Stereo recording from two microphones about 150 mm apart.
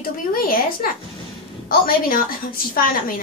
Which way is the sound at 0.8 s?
70° left (ahead or behind).